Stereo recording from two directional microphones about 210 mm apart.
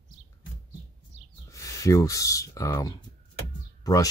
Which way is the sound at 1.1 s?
35° right (ahead or behind).